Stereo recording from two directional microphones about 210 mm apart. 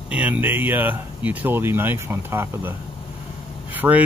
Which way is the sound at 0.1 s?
5° right (ahead or behind).